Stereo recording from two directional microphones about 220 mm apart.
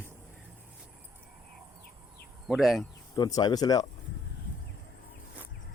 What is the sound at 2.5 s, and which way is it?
Speech, centre (ahead or behind).